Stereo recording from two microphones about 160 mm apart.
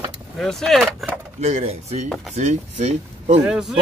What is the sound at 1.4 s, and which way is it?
Speech, 45° right (ahead or behind).